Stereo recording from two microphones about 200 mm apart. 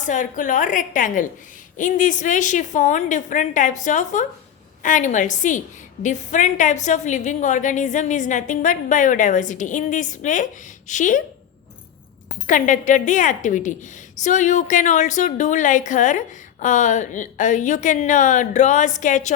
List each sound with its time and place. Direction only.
0.0 s a woman's voice: 40° left (ahead or behind)
12.5 s a woman's voice: 40° left (ahead or behind)